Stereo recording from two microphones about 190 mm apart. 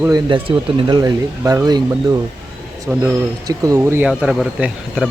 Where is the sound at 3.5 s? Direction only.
15° right (ahead or behind); by 5.0 s centre (ahead or behind).